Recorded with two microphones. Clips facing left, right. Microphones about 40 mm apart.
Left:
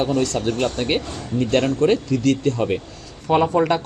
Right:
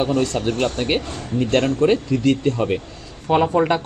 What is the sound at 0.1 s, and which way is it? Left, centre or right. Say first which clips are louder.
Speech: even; right.